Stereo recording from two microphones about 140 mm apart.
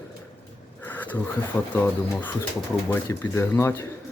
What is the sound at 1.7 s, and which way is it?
Speech, 15° left (ahead or behind).